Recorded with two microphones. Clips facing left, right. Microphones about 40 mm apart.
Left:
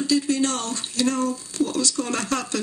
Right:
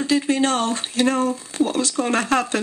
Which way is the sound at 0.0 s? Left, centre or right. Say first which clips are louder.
Right 2 dB; right.